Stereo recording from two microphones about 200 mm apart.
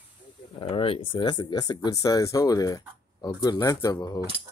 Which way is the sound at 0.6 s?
25° left (ahead or behind).